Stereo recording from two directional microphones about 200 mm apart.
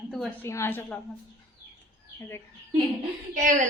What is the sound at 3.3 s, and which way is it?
Speech, 40° right (ahead or behind).